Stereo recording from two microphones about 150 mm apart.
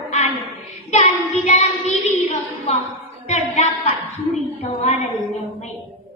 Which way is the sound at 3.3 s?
45° left (ahead or behind).